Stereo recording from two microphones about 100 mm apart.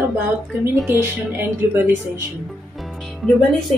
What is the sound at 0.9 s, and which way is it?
Speech, 25° right (ahead or behind).